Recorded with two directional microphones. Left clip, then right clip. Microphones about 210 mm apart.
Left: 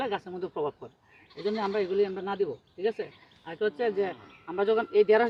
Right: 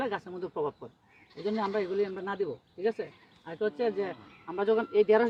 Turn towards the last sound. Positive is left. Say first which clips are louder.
# left 2 dB
turn(degrees=5)  # may be behind; listen again after turning